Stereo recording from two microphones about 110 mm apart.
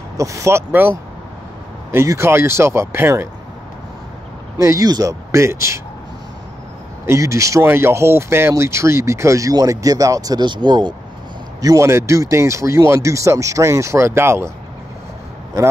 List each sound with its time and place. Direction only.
0.2 s speech: 30° right (ahead or behind)
4.6 s speech: 30° right (ahead or behind)
7.1 s speech: 25° right (ahead or behind); by 11.0 s 45° right (ahead or behind)
11.6 s speech: 25° right (ahead or behind)